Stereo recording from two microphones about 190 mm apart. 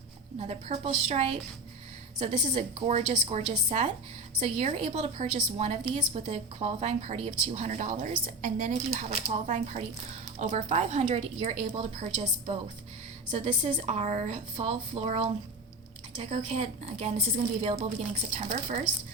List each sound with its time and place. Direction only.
0.3 s a woman's voice: 35° right (ahead or behind)
18.3 s a woman's voice: 35° right (ahead or behind)